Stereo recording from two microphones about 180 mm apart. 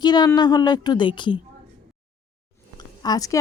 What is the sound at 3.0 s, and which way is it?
Speech, 20° left (ahead or behind).